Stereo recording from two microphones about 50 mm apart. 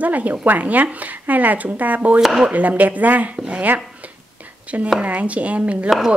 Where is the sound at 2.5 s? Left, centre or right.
Right.